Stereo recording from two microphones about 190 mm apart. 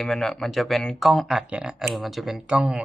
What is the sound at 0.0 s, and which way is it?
Speech, centre (ahead or behind).